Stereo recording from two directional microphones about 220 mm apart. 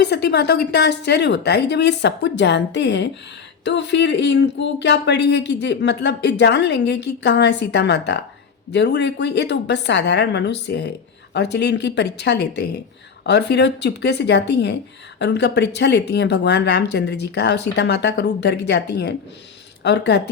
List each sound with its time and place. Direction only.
0.0 s speech: 50° left (ahead or behind)